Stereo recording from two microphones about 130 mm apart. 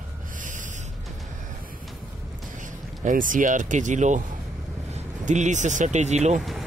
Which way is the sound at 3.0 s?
90° right.